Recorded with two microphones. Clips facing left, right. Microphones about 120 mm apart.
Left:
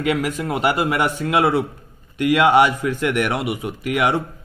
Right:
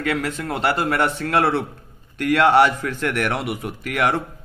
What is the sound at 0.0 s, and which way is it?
A man's voice, 15° left (ahead or behind).